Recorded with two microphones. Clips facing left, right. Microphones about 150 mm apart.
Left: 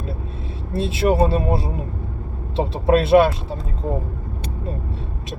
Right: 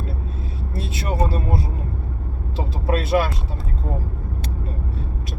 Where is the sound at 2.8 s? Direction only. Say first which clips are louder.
Left 7 dB; 25° left (ahead or behind).